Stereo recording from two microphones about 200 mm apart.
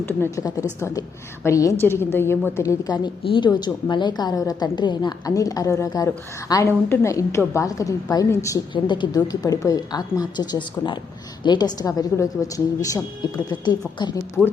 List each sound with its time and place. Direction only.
0.0 s a woman's voice: 15° left (ahead or behind)